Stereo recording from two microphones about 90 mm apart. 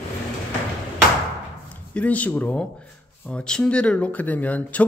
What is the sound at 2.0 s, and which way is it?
Speech, 15° left (ahead or behind).